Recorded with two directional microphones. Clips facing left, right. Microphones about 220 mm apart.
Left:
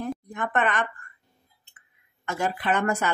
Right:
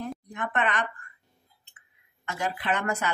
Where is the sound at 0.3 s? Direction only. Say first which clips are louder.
Left 2 dB; 50° left (ahead or behind).